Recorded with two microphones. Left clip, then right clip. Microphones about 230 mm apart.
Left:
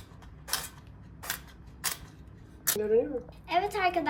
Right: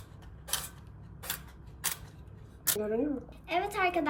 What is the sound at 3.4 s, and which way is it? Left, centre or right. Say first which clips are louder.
Speech: left 2 dB; centre.